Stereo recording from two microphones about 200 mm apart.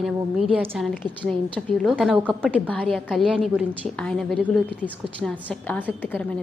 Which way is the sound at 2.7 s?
5° left (ahead or behind).